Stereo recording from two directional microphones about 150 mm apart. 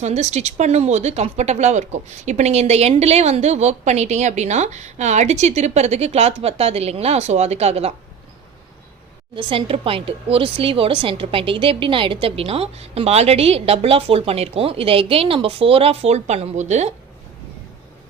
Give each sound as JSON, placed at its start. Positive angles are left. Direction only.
{"t": 0.0, "sound": "speech", "side_deg": -50}
{"t": 9.3, "sound": "a woman's voice", "side_deg": -35}